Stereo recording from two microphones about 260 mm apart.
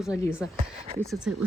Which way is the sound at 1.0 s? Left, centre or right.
Centre.